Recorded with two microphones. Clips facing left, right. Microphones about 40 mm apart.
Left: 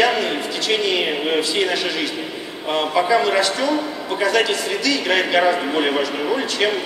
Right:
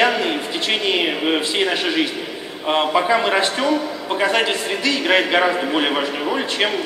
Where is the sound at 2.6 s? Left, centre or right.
Right.